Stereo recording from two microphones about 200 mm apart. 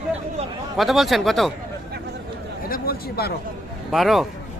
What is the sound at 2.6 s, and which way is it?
Speech, 45° left (ahead or behind).